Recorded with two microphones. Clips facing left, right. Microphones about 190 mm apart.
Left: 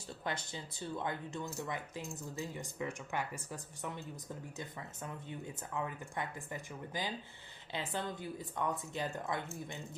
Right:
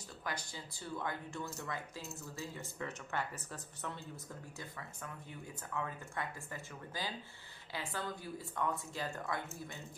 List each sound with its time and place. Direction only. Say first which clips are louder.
0.3 s speech: left 3 dB; 25° left (ahead or behind)
5.0 s speech: left 6 dB; 20° left (ahead or behind)